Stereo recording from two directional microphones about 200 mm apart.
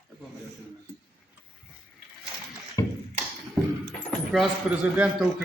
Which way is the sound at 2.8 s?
15° left (ahead or behind).